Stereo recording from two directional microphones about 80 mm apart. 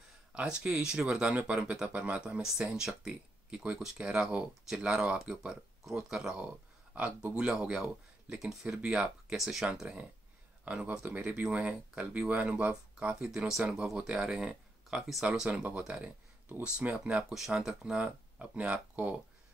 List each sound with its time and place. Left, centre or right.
0.3 s speech: centre
9.8 s speech: centre
15.9 s a sound: centre
16.6 s speech: centre